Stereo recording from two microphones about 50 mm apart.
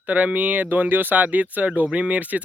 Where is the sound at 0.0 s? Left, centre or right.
Right.